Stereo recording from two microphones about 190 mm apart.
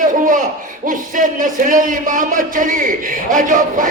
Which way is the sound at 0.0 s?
45° right (ahead or behind).